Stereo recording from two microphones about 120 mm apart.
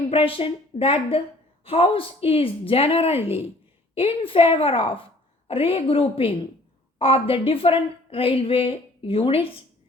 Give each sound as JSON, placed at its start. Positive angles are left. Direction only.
{"t": 0.1, "sound": "a woman's voice", "side_deg": 50}